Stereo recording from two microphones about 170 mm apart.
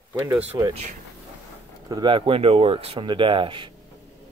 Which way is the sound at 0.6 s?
25° right (ahead or behind).